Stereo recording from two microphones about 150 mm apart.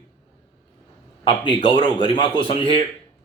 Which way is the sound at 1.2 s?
35° left (ahead or behind).